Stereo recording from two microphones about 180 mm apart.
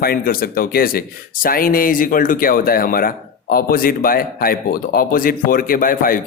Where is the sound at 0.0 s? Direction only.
55° left (ahead or behind).